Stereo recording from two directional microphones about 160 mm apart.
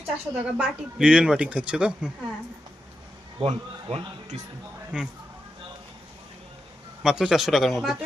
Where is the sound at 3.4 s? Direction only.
45° right (ahead or behind).